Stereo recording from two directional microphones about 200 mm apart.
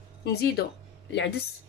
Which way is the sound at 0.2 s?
55° left (ahead or behind).